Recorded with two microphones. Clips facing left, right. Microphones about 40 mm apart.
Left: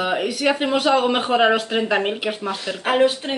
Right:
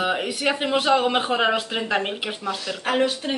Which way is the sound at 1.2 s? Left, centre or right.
Centre.